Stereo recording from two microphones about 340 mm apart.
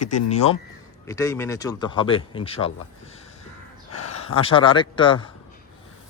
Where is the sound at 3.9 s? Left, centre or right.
Left.